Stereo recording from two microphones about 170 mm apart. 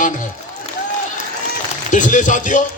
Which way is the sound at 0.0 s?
50° left (ahead or behind).